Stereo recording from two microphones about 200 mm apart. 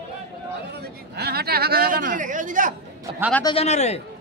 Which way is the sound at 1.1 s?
50° right (ahead or behind).